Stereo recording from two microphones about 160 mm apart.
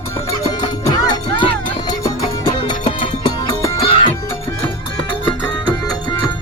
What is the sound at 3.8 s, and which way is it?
Music, 30° left (ahead or behind).